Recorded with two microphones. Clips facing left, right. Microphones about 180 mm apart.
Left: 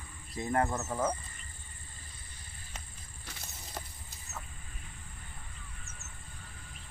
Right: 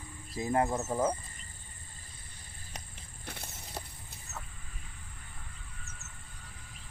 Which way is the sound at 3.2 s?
55° right (ahead or behind).